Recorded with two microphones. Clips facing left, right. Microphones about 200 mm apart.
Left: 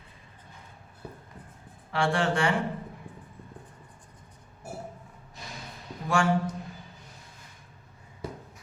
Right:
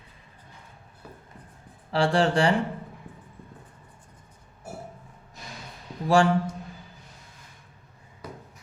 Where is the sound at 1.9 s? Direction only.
35° right (ahead or behind).